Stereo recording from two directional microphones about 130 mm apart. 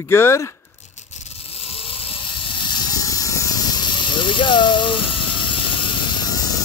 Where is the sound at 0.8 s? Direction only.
65° left (ahead or behind); by 6.4 s 35° left (ahead or behind).